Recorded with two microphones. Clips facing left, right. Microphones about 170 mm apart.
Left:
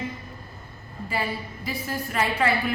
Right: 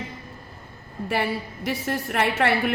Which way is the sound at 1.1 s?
75° right (ahead or behind).